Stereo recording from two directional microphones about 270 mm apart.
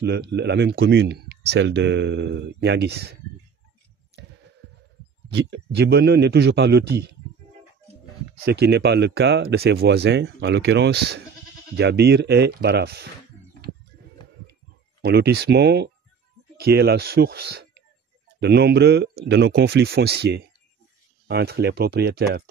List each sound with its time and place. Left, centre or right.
0.0 s speech: right
5.3 s speech: right
8.5 s speech: right
15.0 s speech: right